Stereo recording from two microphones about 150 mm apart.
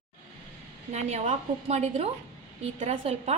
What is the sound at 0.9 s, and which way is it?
A woman's voice, 50° right (ahead or behind).